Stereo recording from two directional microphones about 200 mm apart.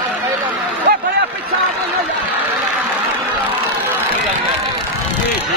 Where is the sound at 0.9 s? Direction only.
45° right (ahead or behind).